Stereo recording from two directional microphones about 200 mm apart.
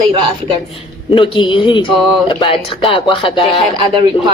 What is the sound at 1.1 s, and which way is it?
A woman's voice, 25° left (ahead or behind).